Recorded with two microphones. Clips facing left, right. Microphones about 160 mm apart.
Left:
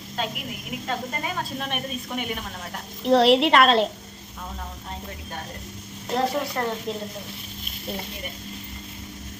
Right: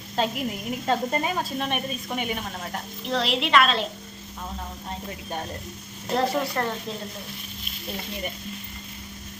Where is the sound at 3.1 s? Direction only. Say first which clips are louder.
Left 7 dB; 60° left (ahead or behind).